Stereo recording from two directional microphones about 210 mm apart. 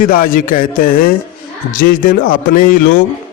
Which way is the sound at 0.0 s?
40° left (ahead or behind).